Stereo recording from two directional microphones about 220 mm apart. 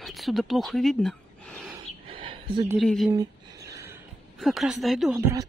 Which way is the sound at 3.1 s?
15° right (ahead or behind).